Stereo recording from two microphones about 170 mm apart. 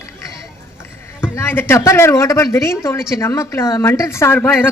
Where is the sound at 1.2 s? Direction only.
15° left (ahead or behind).